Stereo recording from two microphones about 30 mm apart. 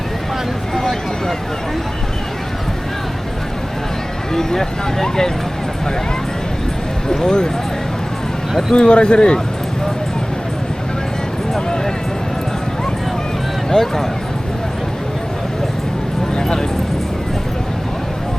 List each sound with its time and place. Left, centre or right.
4.4 s speech: centre
7.1 s speech: left
8.7 s speech: left
13.7 s speech: centre
16.4 s speech: centre